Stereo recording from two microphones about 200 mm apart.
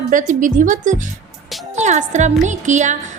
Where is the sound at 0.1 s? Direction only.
40° right (ahead or behind).